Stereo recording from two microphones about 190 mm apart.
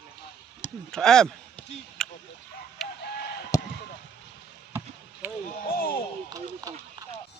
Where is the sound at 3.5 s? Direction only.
15° left (ahead or behind).